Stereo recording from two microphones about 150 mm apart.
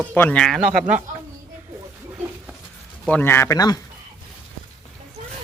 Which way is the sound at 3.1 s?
15° left (ahead or behind).